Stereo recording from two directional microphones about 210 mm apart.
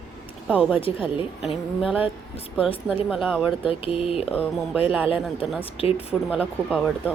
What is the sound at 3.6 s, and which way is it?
Speech, 25° left (ahead or behind).